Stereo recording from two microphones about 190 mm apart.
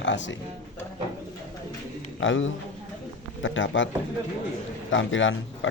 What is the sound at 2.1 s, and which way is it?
A man's voice, 85° left.